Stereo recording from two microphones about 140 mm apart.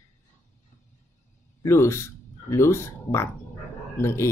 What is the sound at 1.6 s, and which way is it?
Speech, 20° left (ahead or behind).